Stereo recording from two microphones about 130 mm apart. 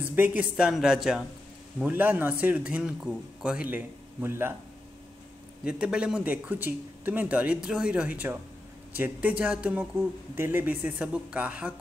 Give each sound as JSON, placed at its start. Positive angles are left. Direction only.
{"t": 0.0, "sound": "speech", "side_deg": -15}
{"t": 1.8, "sound": "speech", "side_deg": -15}
{"t": 5.7, "sound": "speech", "side_deg": -5}